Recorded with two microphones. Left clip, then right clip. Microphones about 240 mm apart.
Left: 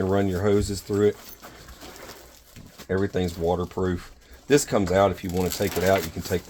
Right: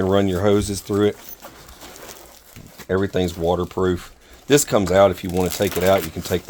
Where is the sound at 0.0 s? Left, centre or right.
Right.